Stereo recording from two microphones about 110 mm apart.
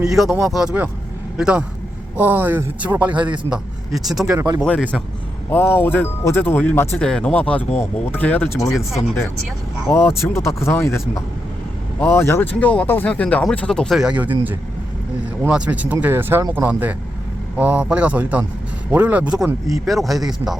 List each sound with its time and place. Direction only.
0.0 s speech: 5° right (ahead or behind)
4.6 s speech: 15° left (ahead or behind)
9.9 s speech: 10° left (ahead or behind)
10.3 s speech: 25° left (ahead or behind); by 14.0 s 5° left (ahead or behind)
14.0 s speech: 10° right (ahead or behind)